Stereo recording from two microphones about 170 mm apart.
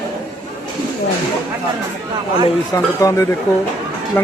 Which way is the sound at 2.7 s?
20° left (ahead or behind).